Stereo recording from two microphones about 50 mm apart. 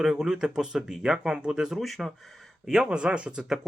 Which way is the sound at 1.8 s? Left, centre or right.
Centre.